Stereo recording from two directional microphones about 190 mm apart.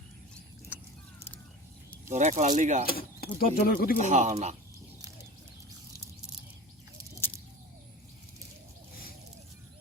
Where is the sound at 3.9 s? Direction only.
40° right (ahead or behind).